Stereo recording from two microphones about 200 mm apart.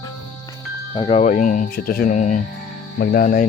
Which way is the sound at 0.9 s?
25° left (ahead or behind).